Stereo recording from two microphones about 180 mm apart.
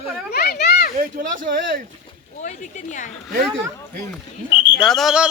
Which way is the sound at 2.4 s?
45° left (ahead or behind).